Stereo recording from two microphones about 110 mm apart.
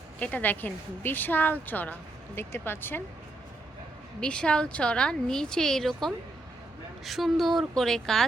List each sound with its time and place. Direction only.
0.2 s a woman's voice: 15° left (ahead or behind)
4.2 s a woman's voice: 10° left (ahead or behind)